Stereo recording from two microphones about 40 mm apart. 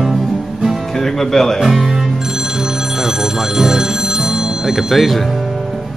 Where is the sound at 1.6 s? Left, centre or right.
Centre.